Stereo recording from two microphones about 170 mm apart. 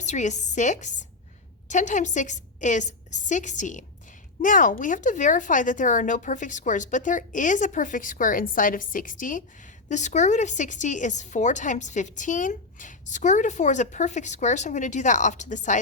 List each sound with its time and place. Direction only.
0.0 s a woman's voice: 45° left (ahead or behind)